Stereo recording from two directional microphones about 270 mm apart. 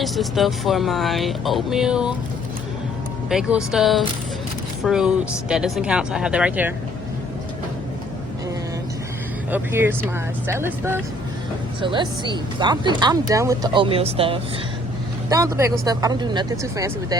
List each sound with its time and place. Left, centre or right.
0.0 s speech: centre
3.2 s speech: centre
9.5 s speech: centre